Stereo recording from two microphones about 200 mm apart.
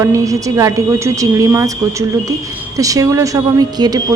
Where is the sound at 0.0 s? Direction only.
15° right (ahead or behind).